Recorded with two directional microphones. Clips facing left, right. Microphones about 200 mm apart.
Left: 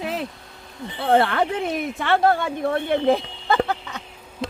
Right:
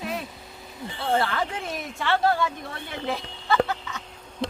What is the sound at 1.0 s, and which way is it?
A woman's voice, 60° left (ahead or behind).